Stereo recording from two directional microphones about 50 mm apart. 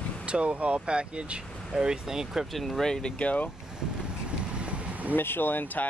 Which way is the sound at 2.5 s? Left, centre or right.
Centre.